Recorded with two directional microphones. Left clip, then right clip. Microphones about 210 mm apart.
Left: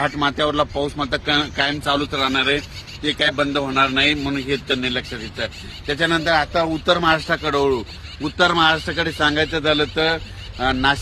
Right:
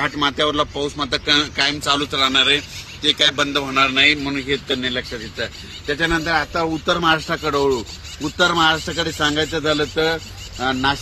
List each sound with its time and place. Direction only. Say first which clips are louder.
0.0 s a man's voice: right 1 dB; 55° left (ahead or behind)
5.9 s speech: left 1 dB; 25° left (ahead or behind); by 7.8 s centre (ahead or behind)
8.2 s a man's voice: even; 15° right (ahead or behind)